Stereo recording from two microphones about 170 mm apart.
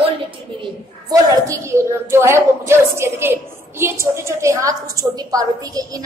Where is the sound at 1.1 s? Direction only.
20° right (ahead or behind).